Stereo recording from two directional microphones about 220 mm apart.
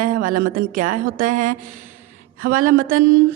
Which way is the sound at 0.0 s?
40° right (ahead or behind).